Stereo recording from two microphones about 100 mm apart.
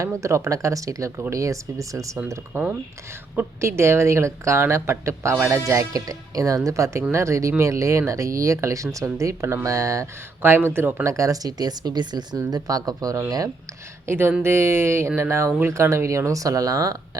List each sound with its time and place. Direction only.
0.2 s speech: 30° right (ahead or behind)
2.5 s speech: 15° right (ahead or behind)
3.6 s speech: 25° right (ahead or behind)
11.0 s speech: 30° right (ahead or behind)
14.1 s speech: 25° right (ahead or behind)